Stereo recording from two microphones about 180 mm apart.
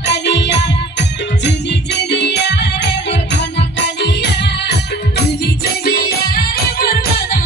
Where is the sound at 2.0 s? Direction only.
70° left (ahead or behind).